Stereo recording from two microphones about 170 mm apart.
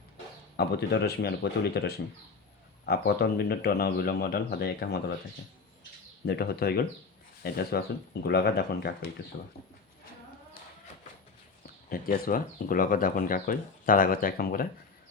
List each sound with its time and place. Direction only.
0.5 s a man's voice: 70° left (ahead or behind)
6.2 s a man's voice: 70° left (ahead or behind)
11.6 s speech: 60° left (ahead or behind)